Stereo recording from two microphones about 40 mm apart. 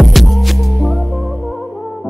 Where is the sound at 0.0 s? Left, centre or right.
Centre.